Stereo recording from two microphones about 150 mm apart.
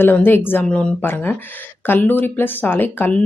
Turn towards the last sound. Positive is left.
turn(degrees=15)  # may be behind; listen again after turning